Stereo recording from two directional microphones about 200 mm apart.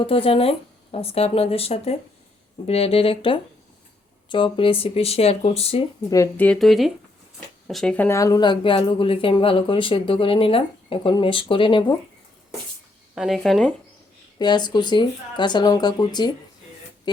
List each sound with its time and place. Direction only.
0.0 s speech: 25° left (ahead or behind)
6.1 s speech: 15° left (ahead or behind)
13.1 s speech: centre (ahead or behind)
14.3 s speech: 20° left (ahead or behind)